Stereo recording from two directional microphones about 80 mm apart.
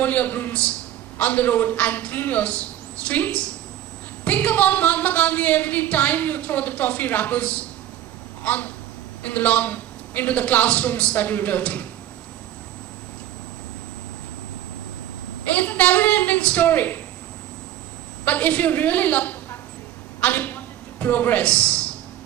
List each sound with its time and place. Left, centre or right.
0.0 s speech: left
15.5 s a sound: centre
18.3 s a man's voice: centre